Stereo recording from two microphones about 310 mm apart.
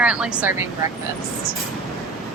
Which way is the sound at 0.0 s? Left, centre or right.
Centre.